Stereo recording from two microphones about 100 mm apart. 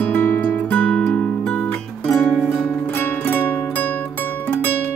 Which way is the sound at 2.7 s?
20° left (ahead or behind).